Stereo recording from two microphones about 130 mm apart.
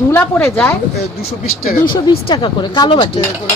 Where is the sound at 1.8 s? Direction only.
40° left (ahead or behind).